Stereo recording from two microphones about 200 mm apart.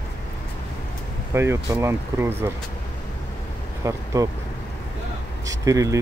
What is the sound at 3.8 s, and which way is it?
Speech, 15° right (ahead or behind).